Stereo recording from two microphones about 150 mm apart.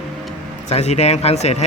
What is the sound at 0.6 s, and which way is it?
Speech, 45° left (ahead or behind).